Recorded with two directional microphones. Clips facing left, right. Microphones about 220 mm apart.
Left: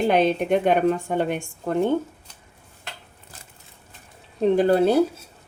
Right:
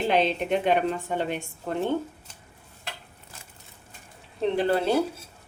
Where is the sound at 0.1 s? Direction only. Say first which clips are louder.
Left 3 dB; 50° left (ahead or behind).